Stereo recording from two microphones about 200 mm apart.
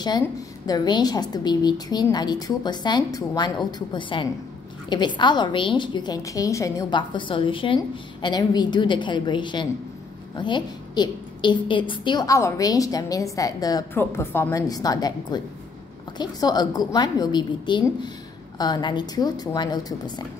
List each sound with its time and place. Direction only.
0.7 s a woman's voice: 20° left (ahead or behind)